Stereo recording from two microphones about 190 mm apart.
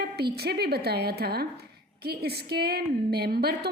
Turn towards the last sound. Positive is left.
turn(degrees=-55)  # may be behind; listen again after turning